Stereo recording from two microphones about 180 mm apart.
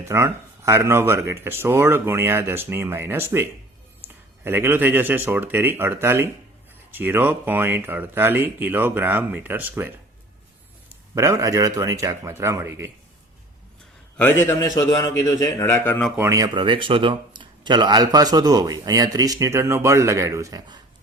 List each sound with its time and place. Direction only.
0.0 s speech: 15° right (ahead or behind)
11.1 s speech: 15° right (ahead or behind)
14.2 s a man's voice: 10° left (ahead or behind)
16.1 s speech: 15° right (ahead or behind)